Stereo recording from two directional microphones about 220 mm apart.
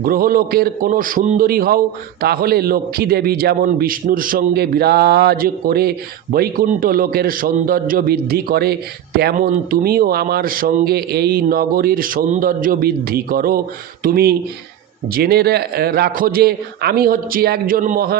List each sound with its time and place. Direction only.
0.0 s a man's voice: 40° right (ahead or behind)